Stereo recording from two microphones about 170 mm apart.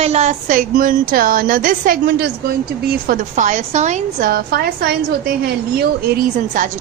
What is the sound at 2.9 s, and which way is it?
A woman's voice, 55° right (ahead or behind).